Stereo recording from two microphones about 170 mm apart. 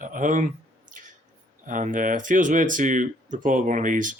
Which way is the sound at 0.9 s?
50° right (ahead or behind).